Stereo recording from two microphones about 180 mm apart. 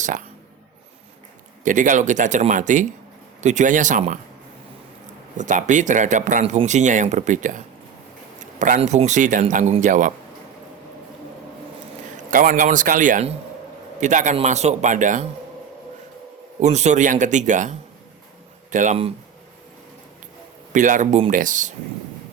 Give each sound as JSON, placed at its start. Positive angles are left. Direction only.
{"t": 0.0, "sound": "speech", "side_deg": -45}
{"t": 1.6, "sound": "speech", "side_deg": -45}
{"t": 5.4, "sound": "speech", "side_deg": -45}
{"t": 12.1, "sound": "a man's voice", "side_deg": -50}
{"t": 16.6, "sound": "speech", "side_deg": -40}
{"t": 20.7, "sound": "speech", "side_deg": -45}